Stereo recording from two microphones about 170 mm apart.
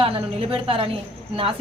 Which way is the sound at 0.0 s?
35° right (ahead or behind).